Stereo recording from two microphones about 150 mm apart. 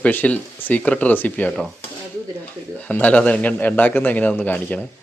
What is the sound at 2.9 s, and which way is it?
Speech, 10° left (ahead or behind).